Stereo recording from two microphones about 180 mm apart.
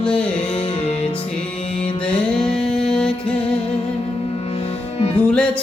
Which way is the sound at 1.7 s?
5° left (ahead or behind).